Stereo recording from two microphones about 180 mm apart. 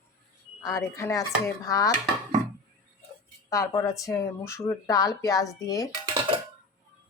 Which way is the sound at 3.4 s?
20° left (ahead or behind).